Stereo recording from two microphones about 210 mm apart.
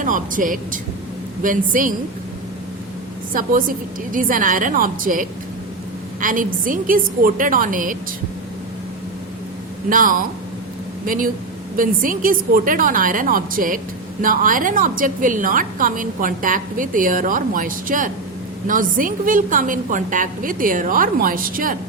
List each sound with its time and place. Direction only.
0.0 s a woman's voice: 40° right (ahead or behind)
3.3 s a woman's voice: 40° right (ahead or behind)
9.9 s a woman's voice: 40° right (ahead or behind)